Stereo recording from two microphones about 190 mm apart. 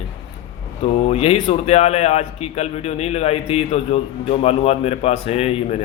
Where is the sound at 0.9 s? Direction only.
35° left (ahead or behind).